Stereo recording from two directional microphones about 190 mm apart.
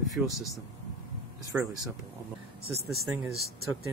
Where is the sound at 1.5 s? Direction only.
5° right (ahead or behind).